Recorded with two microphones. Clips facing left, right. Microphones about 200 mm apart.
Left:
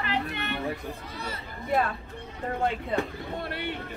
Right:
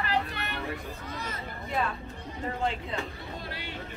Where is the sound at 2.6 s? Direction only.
60° left (ahead or behind).